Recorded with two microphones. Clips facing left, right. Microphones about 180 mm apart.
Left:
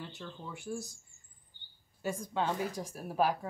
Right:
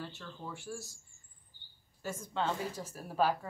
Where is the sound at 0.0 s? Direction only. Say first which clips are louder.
Even; 15° left (ahead or behind).